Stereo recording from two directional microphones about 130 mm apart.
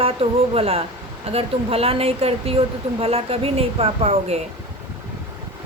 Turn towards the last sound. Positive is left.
turn(degrees=-55)  # may be behind; listen again after turning